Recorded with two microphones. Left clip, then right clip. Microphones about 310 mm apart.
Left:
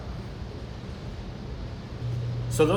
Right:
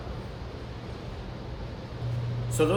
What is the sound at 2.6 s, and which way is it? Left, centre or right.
Speech, centre.